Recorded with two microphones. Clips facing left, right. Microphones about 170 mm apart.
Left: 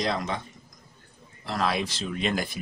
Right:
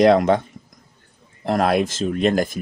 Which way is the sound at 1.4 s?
55° right (ahead or behind).